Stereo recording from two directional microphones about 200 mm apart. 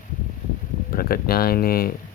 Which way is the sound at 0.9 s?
50° left (ahead or behind).